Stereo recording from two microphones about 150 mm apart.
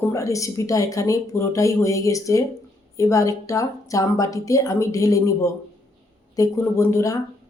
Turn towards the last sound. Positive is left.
turn(degrees=20)  # may be behind; listen again after turning